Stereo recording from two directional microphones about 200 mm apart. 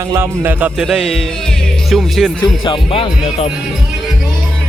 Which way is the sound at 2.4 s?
25° left (ahead or behind).